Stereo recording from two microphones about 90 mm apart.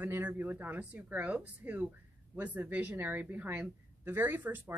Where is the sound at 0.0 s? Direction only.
20° right (ahead or behind).